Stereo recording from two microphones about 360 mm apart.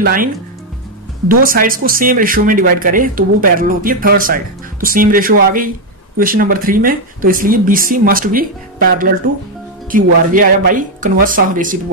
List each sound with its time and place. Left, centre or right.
0.0 s speech: right
1.3 s speech: right
9.8 s speech: right